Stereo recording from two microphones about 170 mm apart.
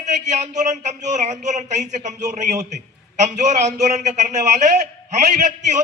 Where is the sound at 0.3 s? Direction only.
45° right (ahead or behind).